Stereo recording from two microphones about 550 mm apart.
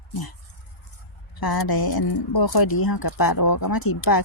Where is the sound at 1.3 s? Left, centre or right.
Left.